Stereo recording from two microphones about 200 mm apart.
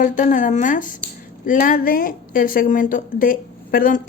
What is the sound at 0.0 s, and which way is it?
Speech, 40° left (ahead or behind).